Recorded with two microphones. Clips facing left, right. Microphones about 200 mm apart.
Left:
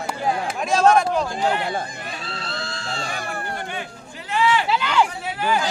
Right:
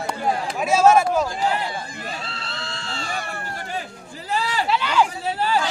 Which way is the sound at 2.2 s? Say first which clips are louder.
Left 3 dB; 40° left (ahead or behind).